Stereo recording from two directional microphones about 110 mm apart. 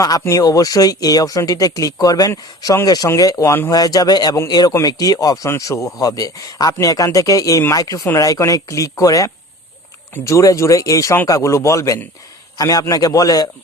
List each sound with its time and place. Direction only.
0.0 s speech: 35° left (ahead or behind)
3.7 s a man's voice: 35° left (ahead or behind)